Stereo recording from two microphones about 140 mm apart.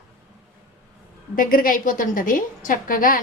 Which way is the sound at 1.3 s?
85° left.